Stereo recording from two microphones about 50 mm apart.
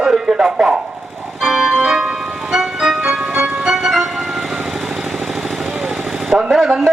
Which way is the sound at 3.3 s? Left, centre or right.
Right.